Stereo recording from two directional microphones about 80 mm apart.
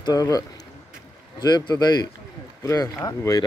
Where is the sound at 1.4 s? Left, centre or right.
Left.